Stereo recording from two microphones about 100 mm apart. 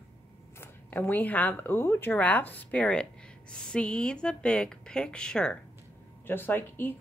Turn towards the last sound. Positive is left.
turn(degrees=20)  # may be behind; listen again after turning